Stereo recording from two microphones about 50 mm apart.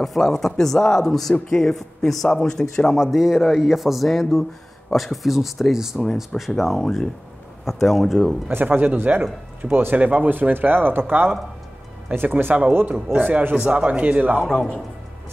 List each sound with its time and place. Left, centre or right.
0.0 s speech: centre
3.0 s speech: centre
8.6 s speech: right
9.9 s speech: right
13.1 s speech: right
13.6 s speech: right
14.4 s speech: centre